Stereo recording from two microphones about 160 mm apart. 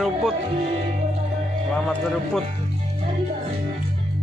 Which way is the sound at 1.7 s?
5° left (ahead or behind).